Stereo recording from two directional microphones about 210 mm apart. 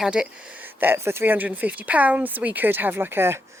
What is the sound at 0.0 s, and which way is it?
Speech, 5° right (ahead or behind).